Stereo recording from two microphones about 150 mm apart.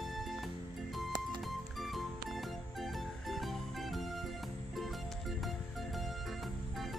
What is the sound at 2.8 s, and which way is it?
Music, centre (ahead or behind).